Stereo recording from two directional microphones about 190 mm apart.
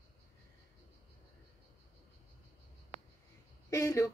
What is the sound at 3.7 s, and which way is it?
Speech, 15° left (ahead or behind).